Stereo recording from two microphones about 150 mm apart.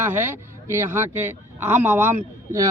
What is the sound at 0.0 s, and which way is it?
A man's voice, 15° right (ahead or behind).